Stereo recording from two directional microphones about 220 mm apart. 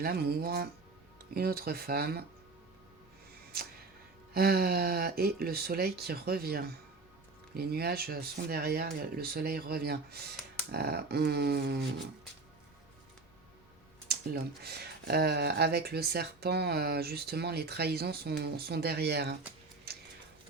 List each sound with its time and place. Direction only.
0.0 s speech: 45° right (ahead or behind)
4.4 s speech: 45° right (ahead or behind)
14.1 s speech: 45° right (ahead or behind)